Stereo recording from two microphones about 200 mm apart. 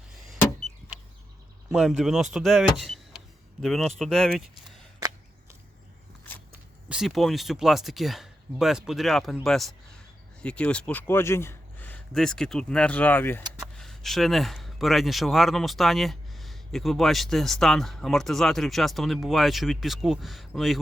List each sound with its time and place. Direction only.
1.7 s speech: centre (ahead or behind)
4.9 s a sound: 20° right (ahead or behind)
6.8 s a man's voice: 5° right (ahead or behind)